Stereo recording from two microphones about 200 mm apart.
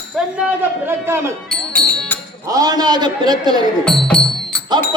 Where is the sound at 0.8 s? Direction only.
10° right (ahead or behind).